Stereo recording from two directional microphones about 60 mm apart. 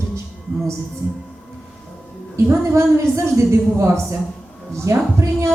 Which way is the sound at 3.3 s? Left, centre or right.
Right.